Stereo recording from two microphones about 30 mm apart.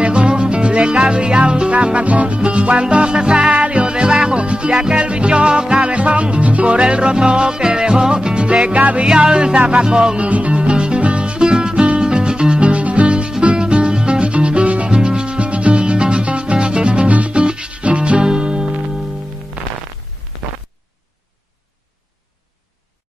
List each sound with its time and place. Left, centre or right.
0.0 s music: right
2.0 s music: right
3.2 s music: right
3.5 s music: right
3.8 s music: right
8.6 s music: right
9.0 s music: centre
9.3 s music: right
10.1 s music: right
10.6 s music: right
14.9 s music: right
18.2 s music: right
19.6 s music: right